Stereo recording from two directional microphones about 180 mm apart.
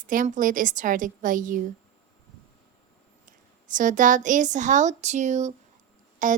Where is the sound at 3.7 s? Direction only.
45° right (ahead or behind).